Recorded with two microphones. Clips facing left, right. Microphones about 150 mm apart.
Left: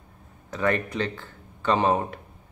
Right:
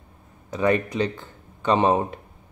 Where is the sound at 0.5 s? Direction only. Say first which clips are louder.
Right 4 dB; 15° right (ahead or behind).